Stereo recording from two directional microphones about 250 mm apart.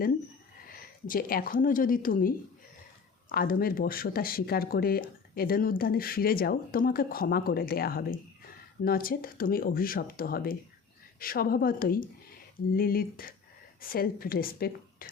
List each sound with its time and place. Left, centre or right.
1.0 s speech: left